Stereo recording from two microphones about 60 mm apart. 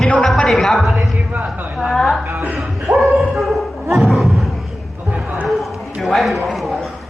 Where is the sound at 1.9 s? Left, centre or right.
Centre.